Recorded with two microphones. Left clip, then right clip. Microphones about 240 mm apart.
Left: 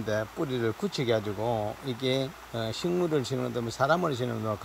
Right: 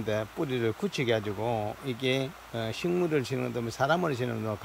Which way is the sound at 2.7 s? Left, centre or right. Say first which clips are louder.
Even; centre.